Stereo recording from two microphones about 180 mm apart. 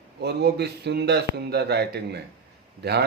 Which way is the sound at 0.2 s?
65° right (ahead or behind).